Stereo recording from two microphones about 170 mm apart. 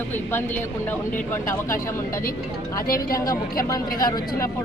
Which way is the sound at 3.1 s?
20° left (ahead or behind).